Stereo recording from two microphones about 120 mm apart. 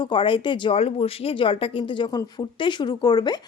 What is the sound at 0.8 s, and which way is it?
A woman's voice, 55° left (ahead or behind).